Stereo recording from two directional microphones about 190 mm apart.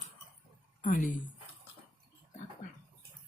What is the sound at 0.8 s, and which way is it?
Speech, 45° left (ahead or behind).